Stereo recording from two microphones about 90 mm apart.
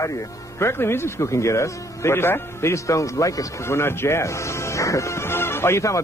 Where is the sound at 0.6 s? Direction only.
30° left (ahead or behind).